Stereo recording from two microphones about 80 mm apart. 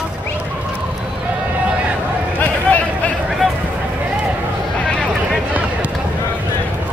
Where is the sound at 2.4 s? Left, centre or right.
Centre.